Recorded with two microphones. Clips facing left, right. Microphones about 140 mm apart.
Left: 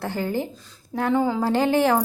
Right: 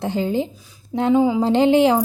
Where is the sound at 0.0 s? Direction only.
20° right (ahead or behind).